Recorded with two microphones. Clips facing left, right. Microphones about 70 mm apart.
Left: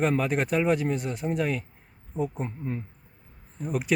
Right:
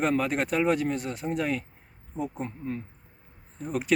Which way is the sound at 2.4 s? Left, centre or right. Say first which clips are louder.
Left 1 dB; centre.